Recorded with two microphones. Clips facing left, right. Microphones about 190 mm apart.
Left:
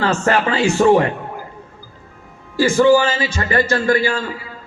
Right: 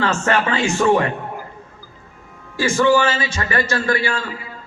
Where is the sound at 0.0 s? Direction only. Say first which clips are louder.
Left 2 dB; 35° left (ahead or behind).